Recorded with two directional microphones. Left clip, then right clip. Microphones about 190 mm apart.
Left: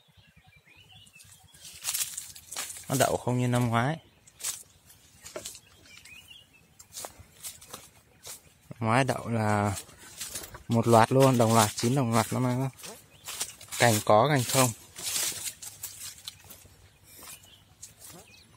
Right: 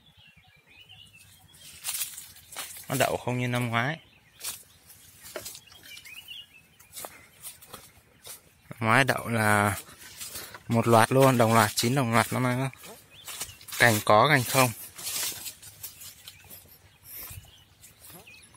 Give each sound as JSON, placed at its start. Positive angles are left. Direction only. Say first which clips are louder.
{"t": 1.8, "sound": "snake", "louder": "left 2 dB", "side_deg": 0}
{"t": 3.0, "sound": "speech", "louder": "even", "side_deg": 25}
{"t": 7.0, "sound": "walk", "louder": "even", "side_deg": 0}
{"t": 10.1, "sound": "a sound", "louder": "left 2 dB", "side_deg": 0}
{"t": 10.7, "sound": "speech", "louder": "even", "side_deg": 5}
{"t": 11.7, "sound": "a sound", "louder": "right 2 dB", "side_deg": 10}
{"t": 13.7, "sound": "speech", "louder": "right 2 dB", "side_deg": 0}